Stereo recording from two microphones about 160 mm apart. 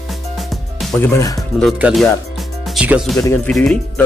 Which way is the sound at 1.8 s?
Centre (ahead or behind).